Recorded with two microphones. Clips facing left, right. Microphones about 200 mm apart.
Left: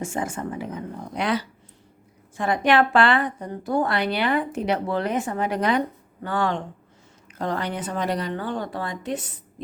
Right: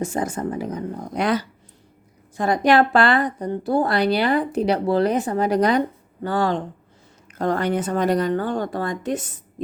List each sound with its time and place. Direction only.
0.0 s a woman's voice: 40° right (ahead or behind)
7.3 s speech: 50° right (ahead or behind)